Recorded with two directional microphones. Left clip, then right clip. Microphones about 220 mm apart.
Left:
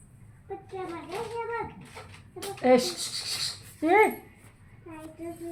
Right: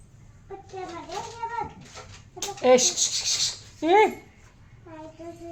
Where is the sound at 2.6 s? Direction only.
40° right (ahead or behind).